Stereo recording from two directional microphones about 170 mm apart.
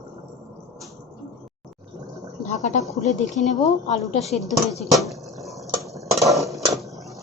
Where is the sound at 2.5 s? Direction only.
45° left (ahead or behind).